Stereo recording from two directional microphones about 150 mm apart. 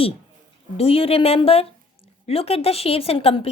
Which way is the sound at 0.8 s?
40° left (ahead or behind).